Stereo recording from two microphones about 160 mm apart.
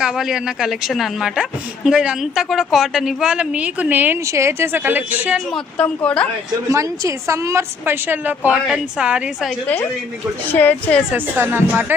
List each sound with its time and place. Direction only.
0.0 s a woman's voice: 5° right (ahead or behind)
5.5 s speech: 5° left (ahead or behind)
6.7 s a woman's voice: 20° right (ahead or behind)
10.5 s speech: 10° left (ahead or behind)
11.1 s speech: 15° right (ahead or behind)